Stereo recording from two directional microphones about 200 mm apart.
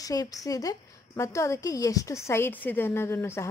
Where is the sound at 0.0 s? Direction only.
15° left (ahead or behind).